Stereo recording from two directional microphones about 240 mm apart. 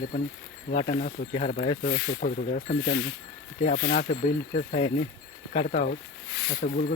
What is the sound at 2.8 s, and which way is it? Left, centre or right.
Speech, left.